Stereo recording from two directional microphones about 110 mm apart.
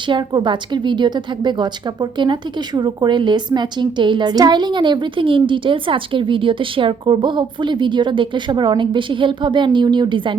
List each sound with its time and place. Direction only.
0.1 s a woman's voice: 45° right (ahead or behind)